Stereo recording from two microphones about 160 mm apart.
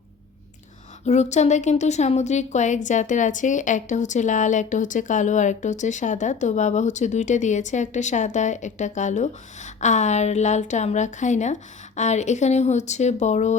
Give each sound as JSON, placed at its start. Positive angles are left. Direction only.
{"t": 1.0, "sound": "a woman's voice", "side_deg": 45}